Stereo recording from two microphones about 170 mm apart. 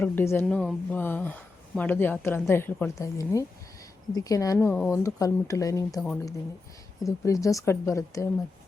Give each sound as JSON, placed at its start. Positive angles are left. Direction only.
{"t": 0.0, "sound": "speech", "side_deg": 10}